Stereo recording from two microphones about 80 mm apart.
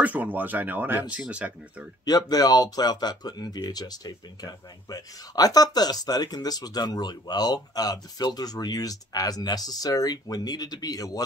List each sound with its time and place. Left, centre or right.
0.0 s speech: centre
2.0 s speech: left